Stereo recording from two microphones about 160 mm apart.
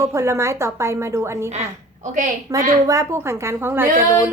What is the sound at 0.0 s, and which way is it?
A woman's voice, 15° right (ahead or behind).